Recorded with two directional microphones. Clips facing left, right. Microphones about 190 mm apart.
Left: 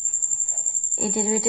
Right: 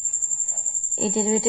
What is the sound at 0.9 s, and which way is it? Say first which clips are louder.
Speech: right 2 dB; 25° right (ahead or behind).